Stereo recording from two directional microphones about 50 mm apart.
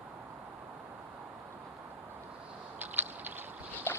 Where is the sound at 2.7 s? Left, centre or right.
Right.